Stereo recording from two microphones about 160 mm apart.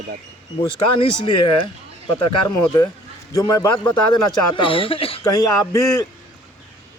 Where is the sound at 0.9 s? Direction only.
30° left (ahead or behind).